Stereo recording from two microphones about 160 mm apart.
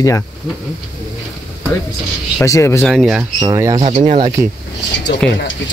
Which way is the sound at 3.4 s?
20° right (ahead or behind).